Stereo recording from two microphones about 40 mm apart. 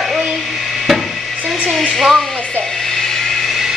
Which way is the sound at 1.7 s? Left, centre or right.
Centre.